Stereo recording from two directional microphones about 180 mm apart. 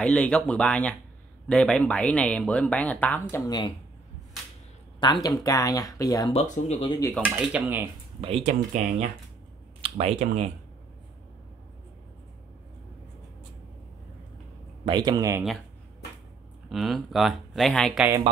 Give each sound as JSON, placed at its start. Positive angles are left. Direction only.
{"t": 0.0, "sound": "speech", "side_deg": 5}
{"t": 5.0, "sound": "speech", "side_deg": 25}
{"t": 6.3, "sound": "speech", "side_deg": 40}
{"t": 7.2, "sound": "speech", "side_deg": -10}
{"t": 8.2, "sound": "speech", "side_deg": -35}
{"t": 14.9, "sound": "speech", "side_deg": -20}
{"t": 16.6, "sound": "speech", "side_deg": 0}